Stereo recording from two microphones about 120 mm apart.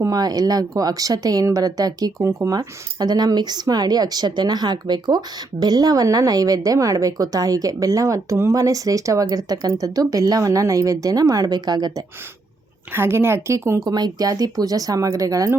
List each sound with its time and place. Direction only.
0.0 s speech: 30° right (ahead or behind)
12.9 s speech: 20° right (ahead or behind)